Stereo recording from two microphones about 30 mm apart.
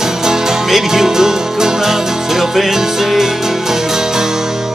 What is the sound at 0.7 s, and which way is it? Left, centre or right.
Music, centre.